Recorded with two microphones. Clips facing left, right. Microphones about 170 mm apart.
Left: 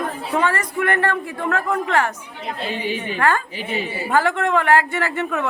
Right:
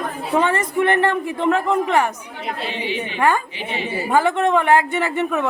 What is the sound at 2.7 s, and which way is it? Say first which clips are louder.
Speech: left 1 dB; 45° left (ahead or behind).